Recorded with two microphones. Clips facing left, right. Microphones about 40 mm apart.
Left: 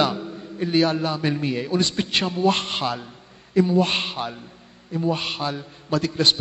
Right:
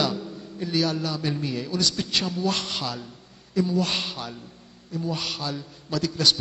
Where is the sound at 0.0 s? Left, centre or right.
Left.